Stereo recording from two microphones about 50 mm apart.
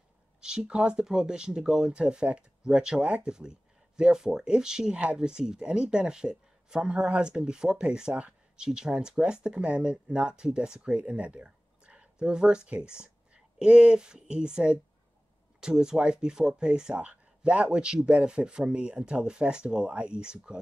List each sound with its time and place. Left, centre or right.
0.4 s speech: centre
8.1 s speech: right
8.5 s speech: centre